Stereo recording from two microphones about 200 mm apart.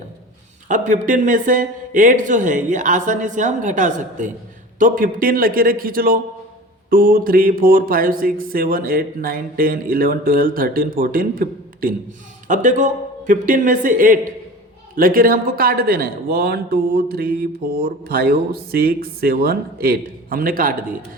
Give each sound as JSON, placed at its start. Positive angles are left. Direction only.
{"t": 0.7, "sound": "a man's voice", "side_deg": -40}